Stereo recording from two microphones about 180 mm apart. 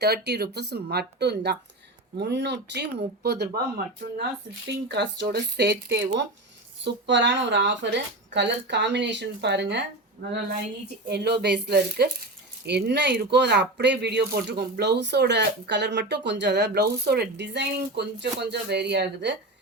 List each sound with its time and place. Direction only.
0.0 s speech: 65° right (ahead or behind)